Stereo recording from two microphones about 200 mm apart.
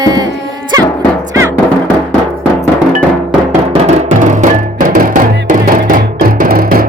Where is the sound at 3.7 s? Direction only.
35° right (ahead or behind).